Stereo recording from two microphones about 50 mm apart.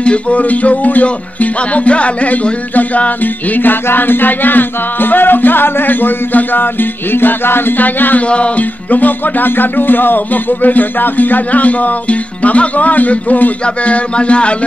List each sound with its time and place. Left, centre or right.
0.0 s music: left